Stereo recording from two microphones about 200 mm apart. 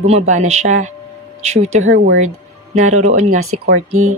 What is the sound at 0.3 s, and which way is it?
Speech, 35° right (ahead or behind).